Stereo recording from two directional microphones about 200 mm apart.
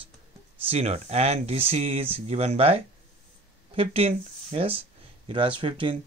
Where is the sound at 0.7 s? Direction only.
30° right (ahead or behind).